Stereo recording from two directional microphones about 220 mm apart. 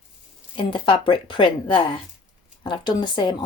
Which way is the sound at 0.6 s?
20° left (ahead or behind).